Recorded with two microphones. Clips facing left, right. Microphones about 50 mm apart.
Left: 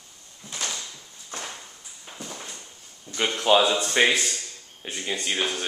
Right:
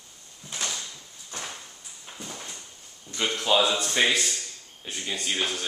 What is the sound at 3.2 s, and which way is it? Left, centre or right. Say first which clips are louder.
Speech: left 3 dB; centre.